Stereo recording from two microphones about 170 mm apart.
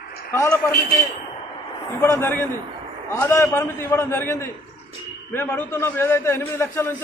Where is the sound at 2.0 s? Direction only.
15° left (ahead or behind).